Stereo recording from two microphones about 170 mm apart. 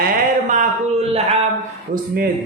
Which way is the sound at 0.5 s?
40° right (ahead or behind).